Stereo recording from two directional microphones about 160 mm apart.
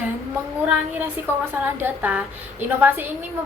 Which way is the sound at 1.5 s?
10° right (ahead or behind).